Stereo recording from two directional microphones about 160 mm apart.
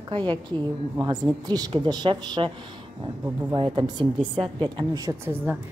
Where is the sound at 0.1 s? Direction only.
30° right (ahead or behind).